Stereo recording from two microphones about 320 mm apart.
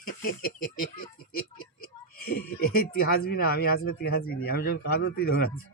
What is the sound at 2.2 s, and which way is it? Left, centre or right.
Speech, left.